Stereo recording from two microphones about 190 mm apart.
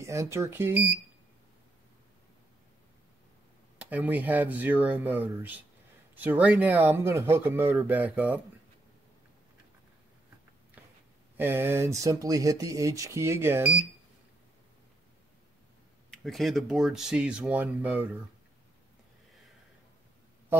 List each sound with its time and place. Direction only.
0.0 s speech: 15° right (ahead or behind)
3.7 s speech: 10° right (ahead or behind)
11.3 s speech: 10° right (ahead or behind)
16.1 s speech: centre (ahead or behind)